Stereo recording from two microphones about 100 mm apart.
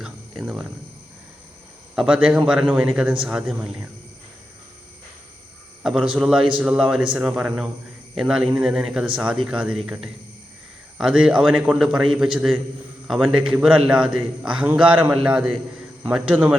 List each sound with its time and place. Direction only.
2.0 s a man's voice: 10° right (ahead or behind)
5.8 s a man's voice: 5° right (ahead or behind)